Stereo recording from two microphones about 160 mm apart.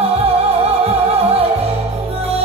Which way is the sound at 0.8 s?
40° right (ahead or behind).